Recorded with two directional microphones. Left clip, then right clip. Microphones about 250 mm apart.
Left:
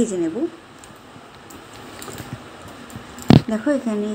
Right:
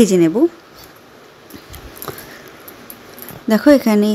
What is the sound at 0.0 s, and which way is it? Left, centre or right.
Speech, right.